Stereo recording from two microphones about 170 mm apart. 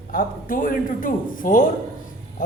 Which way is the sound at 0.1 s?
55° left (ahead or behind).